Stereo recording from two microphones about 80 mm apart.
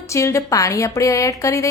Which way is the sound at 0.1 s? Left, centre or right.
Left.